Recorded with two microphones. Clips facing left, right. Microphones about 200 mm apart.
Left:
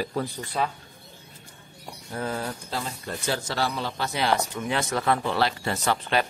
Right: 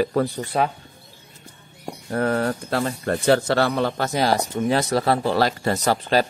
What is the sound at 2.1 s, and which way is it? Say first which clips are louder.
A man's voice: right 9 dB; 65° right (ahead or behind).